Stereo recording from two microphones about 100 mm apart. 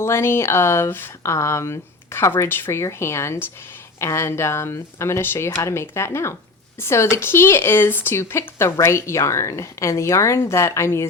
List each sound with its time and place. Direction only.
0.0 s speech: 25° left (ahead or behind)